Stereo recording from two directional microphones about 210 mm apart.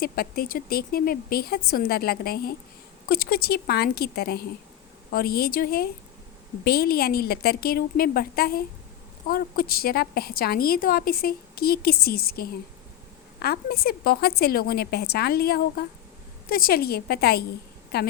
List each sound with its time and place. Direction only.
0.0 s a woman's voice: 45° left (ahead or behind)